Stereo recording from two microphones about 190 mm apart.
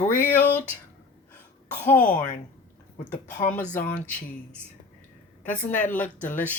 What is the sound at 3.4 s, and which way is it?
Speech, 10° left (ahead or behind).